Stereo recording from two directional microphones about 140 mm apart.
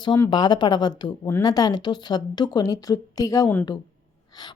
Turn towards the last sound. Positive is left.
turn(degrees=25)  # may be behind; listen again after turning